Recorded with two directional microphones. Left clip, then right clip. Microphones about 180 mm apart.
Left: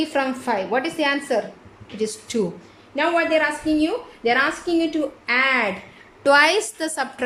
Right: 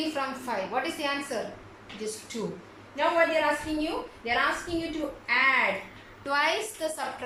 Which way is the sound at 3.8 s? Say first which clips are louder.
Left 8 dB; 70° left (ahead or behind).